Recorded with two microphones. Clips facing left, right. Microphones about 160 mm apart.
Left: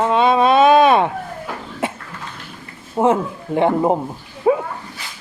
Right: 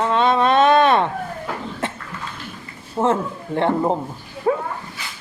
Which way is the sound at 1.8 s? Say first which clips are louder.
Left 4 dB; 10° left (ahead or behind).